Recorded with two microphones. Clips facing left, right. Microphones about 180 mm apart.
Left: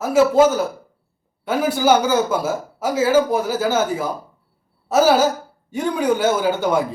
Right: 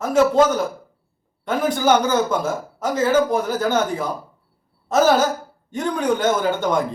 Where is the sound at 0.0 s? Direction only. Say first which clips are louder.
Left 2 dB; 5° left (ahead or behind).